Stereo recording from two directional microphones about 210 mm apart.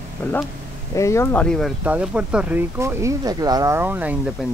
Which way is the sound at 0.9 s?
15° left (ahead or behind).